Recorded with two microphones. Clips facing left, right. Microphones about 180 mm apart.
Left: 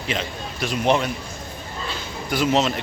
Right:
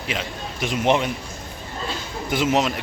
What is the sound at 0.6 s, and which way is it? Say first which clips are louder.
Speech: even; 20° right (ahead or behind).